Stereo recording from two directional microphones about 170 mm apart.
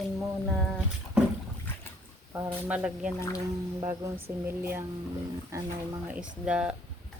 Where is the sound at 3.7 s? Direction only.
20° right (ahead or behind).